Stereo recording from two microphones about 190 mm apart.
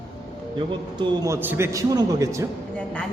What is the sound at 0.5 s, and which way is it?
A man's voice, 25° right (ahead or behind).